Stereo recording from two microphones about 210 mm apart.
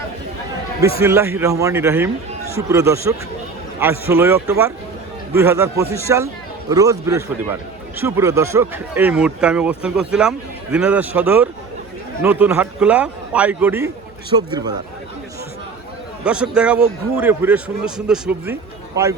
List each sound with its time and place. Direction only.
0.9 s a man's voice: 15° right (ahead or behind)
16.2 s a man's voice: 5° right (ahead or behind)